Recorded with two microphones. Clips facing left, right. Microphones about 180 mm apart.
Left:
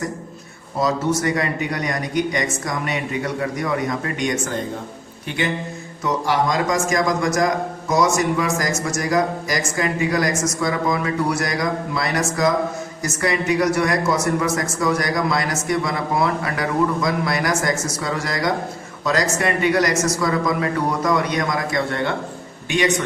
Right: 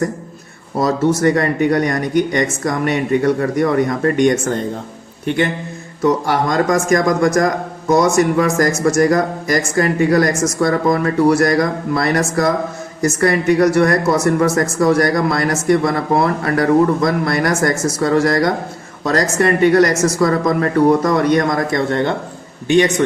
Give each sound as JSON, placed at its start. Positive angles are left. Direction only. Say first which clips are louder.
{"t": 0.8, "sound": "a man's voice", "louder": "right 5 dB", "side_deg": -50}
{"t": 6.2, "sound": "a man's voice", "louder": "right 4 dB", "side_deg": -55}